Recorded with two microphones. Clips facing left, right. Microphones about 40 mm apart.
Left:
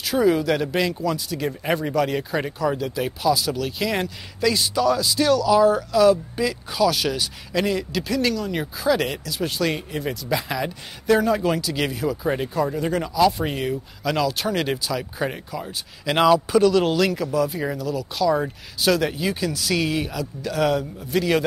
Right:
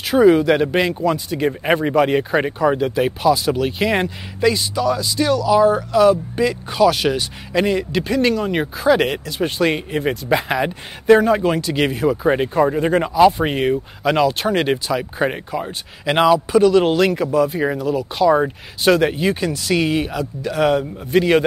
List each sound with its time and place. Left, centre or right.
0.0 s speech: right
4.6 s speech: centre; by 16.2 s right
16.2 s speech: centre; by 21.4 s right